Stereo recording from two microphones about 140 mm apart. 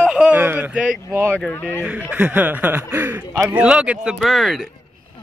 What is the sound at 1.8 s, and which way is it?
A man's voice, 10° right (ahead or behind).